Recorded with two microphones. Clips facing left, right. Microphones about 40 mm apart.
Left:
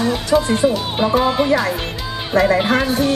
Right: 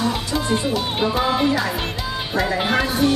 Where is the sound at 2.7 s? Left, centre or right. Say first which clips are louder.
Left 2 dB; centre.